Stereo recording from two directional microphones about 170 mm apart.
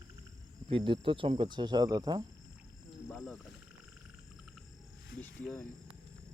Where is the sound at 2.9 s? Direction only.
Centre (ahead or behind).